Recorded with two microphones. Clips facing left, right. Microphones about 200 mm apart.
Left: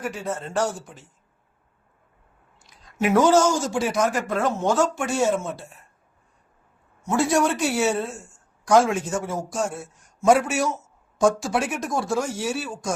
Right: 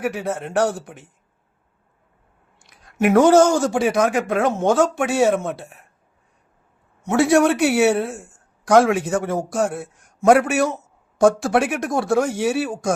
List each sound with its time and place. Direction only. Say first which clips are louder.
0.0 s a woman's voice: right 5 dB; 65° right (ahead or behind)
2.6 s a woman's voice: right 5 dB; 60° right (ahead or behind)
7.0 s a woman's voice: right 5 dB; 65° right (ahead or behind)